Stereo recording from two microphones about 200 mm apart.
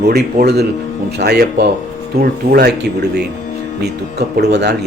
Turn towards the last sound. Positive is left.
turn(degrees=-55)  # may be behind; listen again after turning